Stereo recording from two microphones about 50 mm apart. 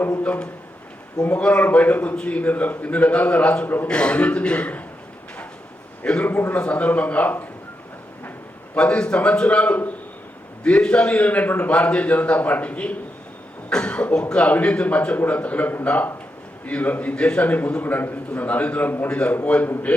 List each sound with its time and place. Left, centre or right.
0.1 s a man's voice: left
2.1 s a man's voice: left
2.4 s a man's voice: left
6.0 s a man's voice: left
8.7 s a man's voice: left
11.7 s a man's voice: left
17.4 s a man's voice: left